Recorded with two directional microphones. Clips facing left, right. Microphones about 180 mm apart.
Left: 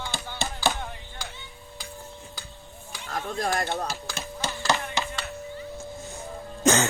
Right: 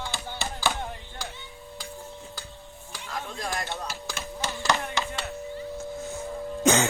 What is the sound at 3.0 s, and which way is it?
Speech, 50° left (ahead or behind).